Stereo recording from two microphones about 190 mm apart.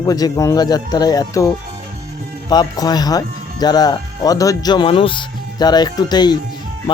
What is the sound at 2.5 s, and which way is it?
A man's voice, 20° left (ahead or behind).